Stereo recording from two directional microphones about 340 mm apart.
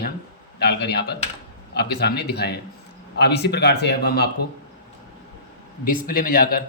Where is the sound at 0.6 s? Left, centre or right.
Left.